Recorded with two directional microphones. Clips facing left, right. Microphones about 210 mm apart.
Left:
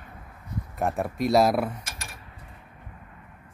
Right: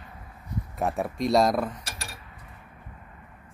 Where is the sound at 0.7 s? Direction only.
Centre (ahead or behind).